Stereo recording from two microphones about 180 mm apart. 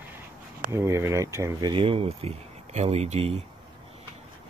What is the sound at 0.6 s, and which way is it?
Speech, 15° right (ahead or behind).